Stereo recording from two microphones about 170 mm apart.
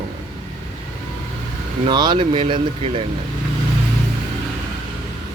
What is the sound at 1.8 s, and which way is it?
Speech, 25° right (ahead or behind).